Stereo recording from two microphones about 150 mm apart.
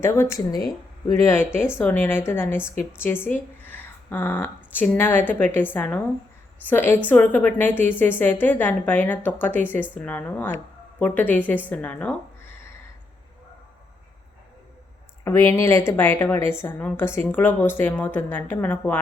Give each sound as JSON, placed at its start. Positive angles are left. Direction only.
{"t": 0.0, "sound": "speech", "side_deg": 15}
{"t": 1.8, "sound": "a woman's voice", "side_deg": 10}
{"t": 3.6, "sound": "a woman's voice", "side_deg": 15}
{"t": 15.2, "sound": "a woman's voice", "side_deg": 20}